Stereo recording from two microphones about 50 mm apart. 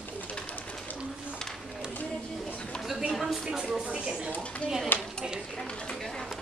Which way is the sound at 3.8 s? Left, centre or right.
Right.